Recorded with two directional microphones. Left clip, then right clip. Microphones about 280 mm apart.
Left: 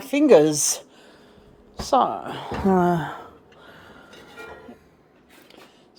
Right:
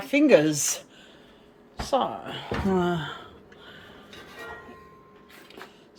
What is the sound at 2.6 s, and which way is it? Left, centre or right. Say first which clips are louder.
Speech: left 7 dB; left.